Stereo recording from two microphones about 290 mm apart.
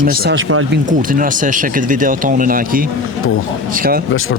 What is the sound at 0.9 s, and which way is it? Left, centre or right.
Speech, right.